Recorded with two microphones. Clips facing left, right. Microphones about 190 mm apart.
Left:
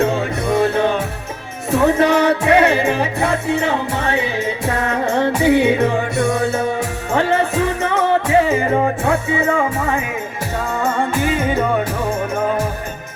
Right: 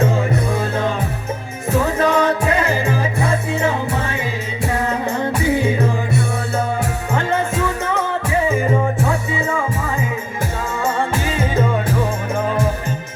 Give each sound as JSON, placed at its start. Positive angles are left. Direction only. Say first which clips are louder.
{"t": 0.0, "sound": "music", "louder": "left 1 dB", "side_deg": 70}
{"t": 1.7, "sound": "music", "louder": "left 3 dB", "side_deg": 70}
{"t": 11.2, "sound": "music", "louder": "left 3 dB", "side_deg": 55}